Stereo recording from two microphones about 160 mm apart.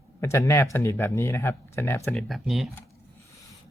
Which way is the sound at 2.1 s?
Centre (ahead or behind).